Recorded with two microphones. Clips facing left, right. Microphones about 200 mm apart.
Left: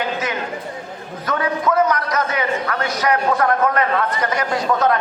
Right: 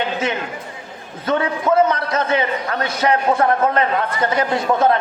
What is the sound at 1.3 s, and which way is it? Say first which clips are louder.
A man's voice: right 2 dB; 25° right (ahead or behind).